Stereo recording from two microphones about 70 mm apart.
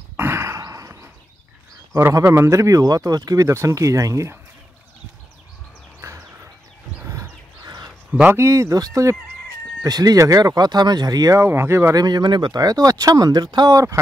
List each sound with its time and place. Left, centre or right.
0.2 s sigh: right
0.6 s a sound: right
2.3 s speech: right
3.4 s speech: right
5.9 s a sound: right
7.6 s bird: right
8.3 s speech: right
8.7 s speech: right
9.8 s speech: right
10.1 s speech: right
11.4 s speech: right
11.9 s speech: right